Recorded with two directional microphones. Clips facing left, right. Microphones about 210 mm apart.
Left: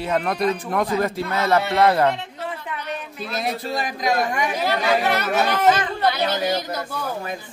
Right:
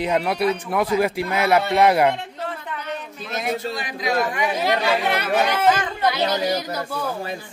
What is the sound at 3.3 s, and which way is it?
A man's voice, 35° left (ahead or behind).